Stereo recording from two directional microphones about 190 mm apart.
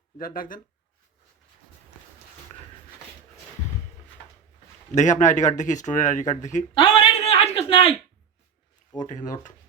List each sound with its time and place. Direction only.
0.2 s speech: 50° left (ahead or behind)
4.9 s a man's voice: 40° left (ahead or behind)
6.7 s a sound: 30° left (ahead or behind)
9.0 s speech: 40° left (ahead or behind)